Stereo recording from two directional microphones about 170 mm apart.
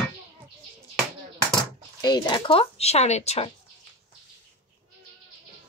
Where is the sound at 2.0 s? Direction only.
25° left (ahead or behind).